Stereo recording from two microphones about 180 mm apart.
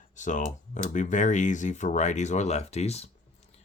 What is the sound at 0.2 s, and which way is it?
Speech, 45° left (ahead or behind).